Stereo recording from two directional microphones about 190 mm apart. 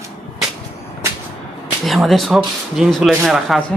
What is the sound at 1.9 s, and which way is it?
Speech, centre (ahead or behind).